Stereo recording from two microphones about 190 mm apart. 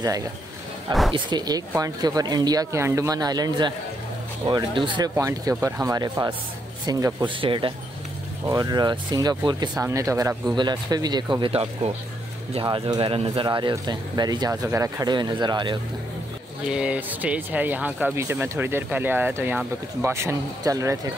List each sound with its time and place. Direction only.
1.1 s speech: 20° right (ahead or behind)
16.6 s speech: 5° right (ahead or behind)